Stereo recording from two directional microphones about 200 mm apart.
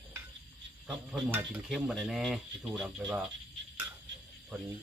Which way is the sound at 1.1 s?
10° right (ahead or behind).